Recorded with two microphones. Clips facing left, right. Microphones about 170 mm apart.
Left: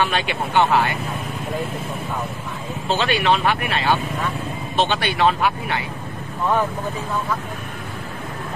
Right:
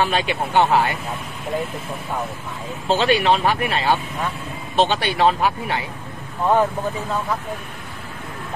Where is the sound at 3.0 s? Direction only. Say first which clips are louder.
Right 2 dB; 40° right (ahead or behind).